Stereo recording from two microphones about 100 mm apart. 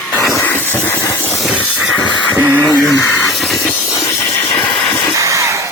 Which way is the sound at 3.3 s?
Centre (ahead or behind).